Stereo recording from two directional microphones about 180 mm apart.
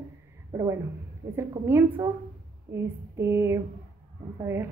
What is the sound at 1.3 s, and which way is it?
A woman's voice, 15° right (ahead or behind).